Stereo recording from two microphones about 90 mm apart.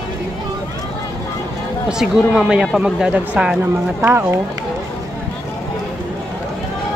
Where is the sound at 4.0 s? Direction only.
25° right (ahead or behind).